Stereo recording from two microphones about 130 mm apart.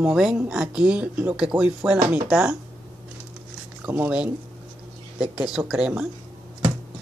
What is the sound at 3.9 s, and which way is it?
Speech, 10° right (ahead or behind).